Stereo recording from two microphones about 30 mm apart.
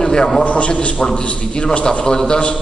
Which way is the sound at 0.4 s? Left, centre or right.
Left.